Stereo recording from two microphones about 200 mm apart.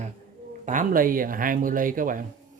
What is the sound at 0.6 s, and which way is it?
Speech, 40° right (ahead or behind).